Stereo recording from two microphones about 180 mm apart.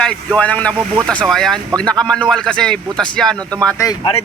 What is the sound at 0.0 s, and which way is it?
Speech, 5° left (ahead or behind).